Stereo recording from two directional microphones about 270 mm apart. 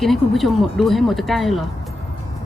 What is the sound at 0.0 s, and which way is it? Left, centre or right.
Speech, centre.